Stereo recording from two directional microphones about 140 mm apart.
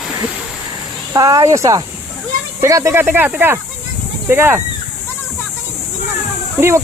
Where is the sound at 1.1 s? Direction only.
25° right (ahead or behind).